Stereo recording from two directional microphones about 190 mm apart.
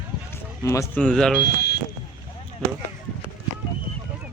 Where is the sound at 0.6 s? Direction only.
15° left (ahead or behind).